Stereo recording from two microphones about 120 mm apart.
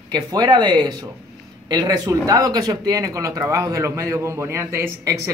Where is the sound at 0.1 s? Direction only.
35° right (ahead or behind).